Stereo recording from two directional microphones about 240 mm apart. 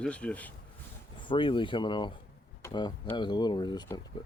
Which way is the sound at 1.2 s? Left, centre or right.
Left.